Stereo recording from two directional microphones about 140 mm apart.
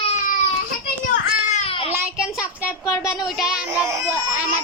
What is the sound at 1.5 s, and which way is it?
Child singing, 45° left (ahead or behind).